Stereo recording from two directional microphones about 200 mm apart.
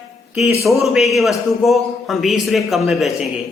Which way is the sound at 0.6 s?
Centre (ahead or behind).